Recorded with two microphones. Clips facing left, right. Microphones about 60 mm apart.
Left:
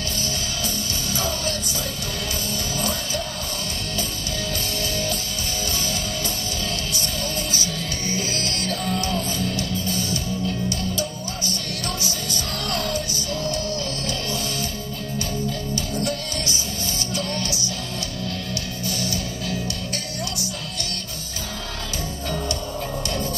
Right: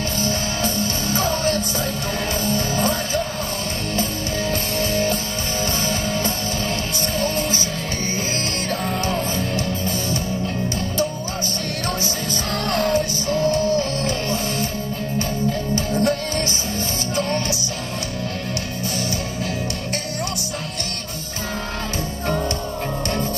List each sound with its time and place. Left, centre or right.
0.7 s music: right
4.5 s music: right
7.2 s music: right
8.6 s music: right
12.6 s music: right
15.7 s music: right